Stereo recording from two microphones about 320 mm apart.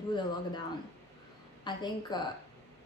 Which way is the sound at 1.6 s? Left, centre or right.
Centre.